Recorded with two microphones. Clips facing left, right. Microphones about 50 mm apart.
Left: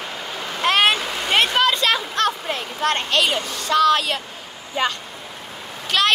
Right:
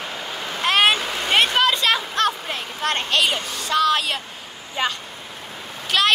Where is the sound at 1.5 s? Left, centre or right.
Centre.